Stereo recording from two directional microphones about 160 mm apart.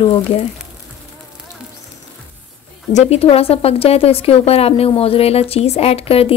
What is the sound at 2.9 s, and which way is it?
Speech, 40° left (ahead or behind).